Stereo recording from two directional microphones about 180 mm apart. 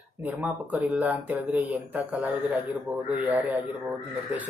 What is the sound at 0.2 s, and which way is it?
Speech, 10° right (ahead or behind).